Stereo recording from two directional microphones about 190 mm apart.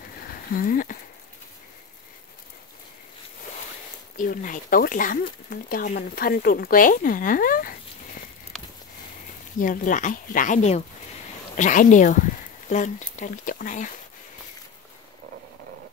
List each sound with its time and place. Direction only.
0.3 s speech: 50° left (ahead or behind)
4.2 s speech: 45° left (ahead or behind)
9.6 s speech: 45° left (ahead or behind)